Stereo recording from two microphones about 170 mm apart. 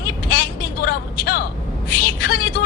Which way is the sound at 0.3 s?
60° left (ahead or behind).